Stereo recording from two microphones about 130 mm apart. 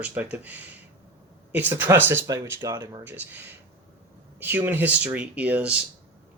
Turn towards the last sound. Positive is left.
turn(degrees=-10)  # may be behind; listen again after turning